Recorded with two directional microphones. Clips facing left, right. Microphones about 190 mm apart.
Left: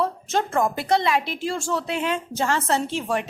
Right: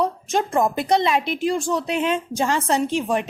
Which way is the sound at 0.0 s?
15° right (ahead or behind).